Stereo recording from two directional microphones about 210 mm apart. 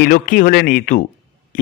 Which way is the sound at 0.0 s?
40° left (ahead or behind).